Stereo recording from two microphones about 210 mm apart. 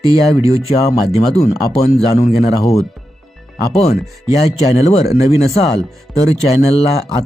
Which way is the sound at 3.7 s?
30° left (ahead or behind).